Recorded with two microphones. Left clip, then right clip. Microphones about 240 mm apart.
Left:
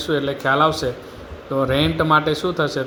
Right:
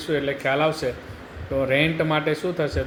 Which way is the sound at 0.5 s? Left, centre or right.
Centre.